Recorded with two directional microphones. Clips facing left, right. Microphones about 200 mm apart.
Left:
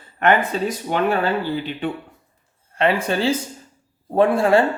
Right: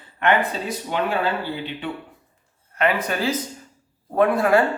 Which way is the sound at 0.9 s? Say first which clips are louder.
Left 2 dB; 45° left (ahead or behind).